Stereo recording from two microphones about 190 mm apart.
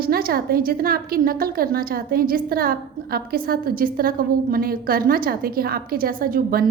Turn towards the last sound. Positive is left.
turn(degrees=-50)  # may be behind; listen again after turning